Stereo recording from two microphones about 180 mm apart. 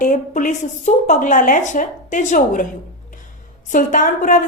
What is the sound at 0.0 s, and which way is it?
A woman's voice, 45° left (ahead or behind).